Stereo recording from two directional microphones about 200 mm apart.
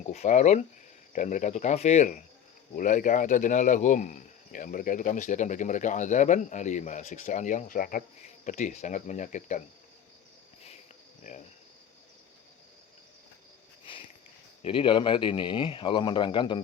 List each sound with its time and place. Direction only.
0.0 s speech: 35° left (ahead or behind)
11.2 s speech: 35° left (ahead or behind)
13.9 s a sound: 25° left (ahead or behind)
14.6 s speech: 25° left (ahead or behind)